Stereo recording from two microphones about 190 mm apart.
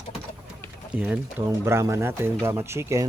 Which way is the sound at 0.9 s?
5° right (ahead or behind).